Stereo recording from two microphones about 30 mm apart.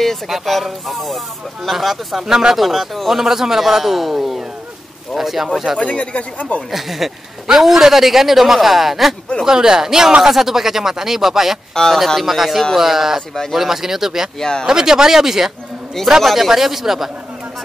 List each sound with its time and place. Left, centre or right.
0.5 s speech: centre
2.2 s speech: centre
2.5 s speech: centre
3.2 s speech: centre
5.8 s speech: left
6.7 s speech: centre
9.5 s speech: right
11.7 s speech: left
12.2 s speech: centre
14.4 s speech: left
14.7 s speech: right
16.2 s speech: centre
16.4 s speech: centre